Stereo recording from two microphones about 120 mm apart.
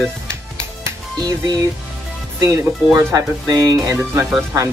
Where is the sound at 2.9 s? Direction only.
30° right (ahead or behind).